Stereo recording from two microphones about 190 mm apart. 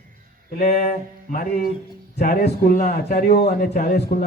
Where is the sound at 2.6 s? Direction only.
45° left (ahead or behind).